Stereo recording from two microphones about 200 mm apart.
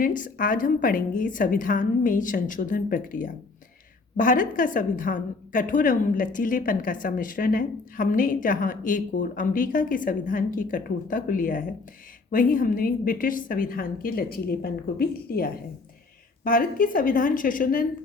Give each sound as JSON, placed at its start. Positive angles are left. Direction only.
{"t": 0.0, "sound": "a woman's voice", "side_deg": 45}